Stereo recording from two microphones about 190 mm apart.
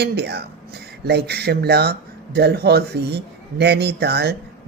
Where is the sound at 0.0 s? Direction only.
60° right (ahead or behind).